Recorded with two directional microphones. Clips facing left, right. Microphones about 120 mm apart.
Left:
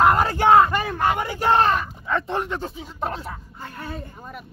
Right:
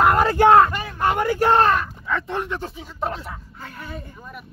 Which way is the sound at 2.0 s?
25° left (ahead or behind).